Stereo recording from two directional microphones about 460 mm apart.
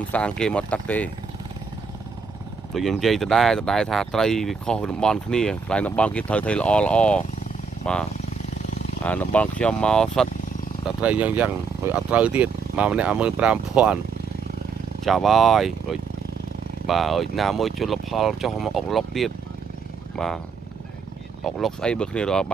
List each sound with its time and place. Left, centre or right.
0.1 s speech: centre
2.7 s speech: centre
9.0 s speech: centre
15.0 s speech: centre
21.5 s speech: centre